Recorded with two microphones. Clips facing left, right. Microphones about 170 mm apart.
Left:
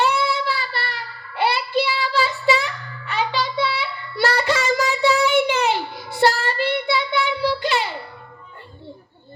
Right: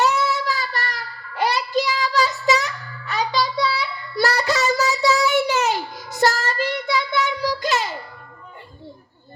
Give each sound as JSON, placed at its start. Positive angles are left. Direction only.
{"t": 0.0, "sound": "child singing", "side_deg": -40}